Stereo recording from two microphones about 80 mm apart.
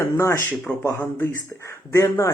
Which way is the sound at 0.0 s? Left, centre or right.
Left.